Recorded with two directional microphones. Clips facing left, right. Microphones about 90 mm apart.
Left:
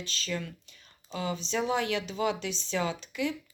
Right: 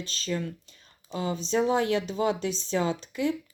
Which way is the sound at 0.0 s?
35° right (ahead or behind).